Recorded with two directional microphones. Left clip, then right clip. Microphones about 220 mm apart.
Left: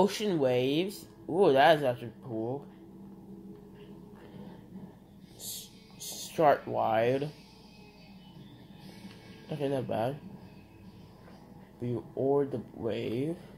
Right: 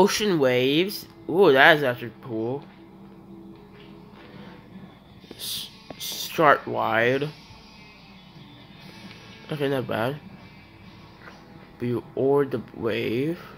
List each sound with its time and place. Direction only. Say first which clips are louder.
0.0 s speech: right 7 dB; 25° right (ahead or behind)
5.9 s speech: right 6 dB; 20° right (ahead or behind)
9.5 s speech: right 6 dB; 20° right (ahead or behind)
11.8 s speech: right 7 dB; 25° right (ahead or behind)